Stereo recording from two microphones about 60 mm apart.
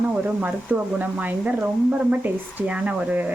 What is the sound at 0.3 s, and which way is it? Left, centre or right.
Speech, right.